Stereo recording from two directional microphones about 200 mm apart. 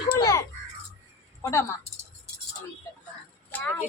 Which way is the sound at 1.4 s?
15° left (ahead or behind).